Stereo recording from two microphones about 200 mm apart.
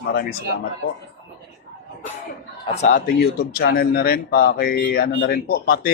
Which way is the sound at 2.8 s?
45° left (ahead or behind).